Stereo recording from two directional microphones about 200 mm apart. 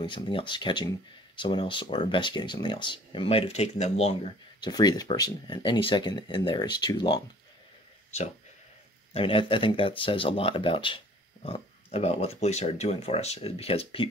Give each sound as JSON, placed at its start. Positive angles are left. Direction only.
{"t": 0.0, "sound": "speech", "side_deg": 25}
{"t": 8.1, "sound": "speech", "side_deg": 35}